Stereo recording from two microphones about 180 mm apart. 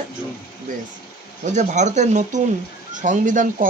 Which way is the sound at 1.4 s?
40° right (ahead or behind).